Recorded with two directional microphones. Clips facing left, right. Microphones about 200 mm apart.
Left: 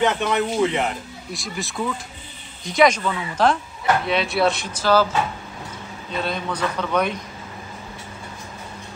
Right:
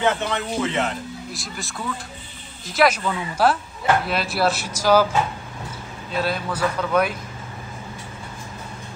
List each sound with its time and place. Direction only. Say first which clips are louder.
0.0 s speech: left 2 dB; 15° left (ahead or behind)
1.3 s speech: left 4 dB; centre (ahead or behind)
6.1 s speech: right 1 dB; 5° right (ahead or behind)